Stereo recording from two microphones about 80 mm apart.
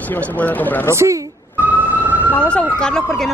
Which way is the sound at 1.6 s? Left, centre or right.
Right.